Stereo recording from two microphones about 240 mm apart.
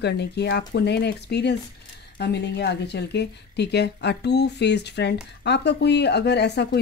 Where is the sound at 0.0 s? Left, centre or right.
Left.